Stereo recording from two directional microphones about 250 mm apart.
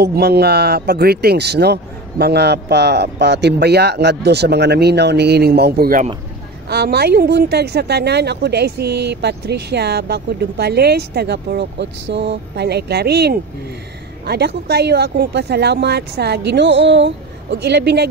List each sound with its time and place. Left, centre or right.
0.0 s a woman's voice: right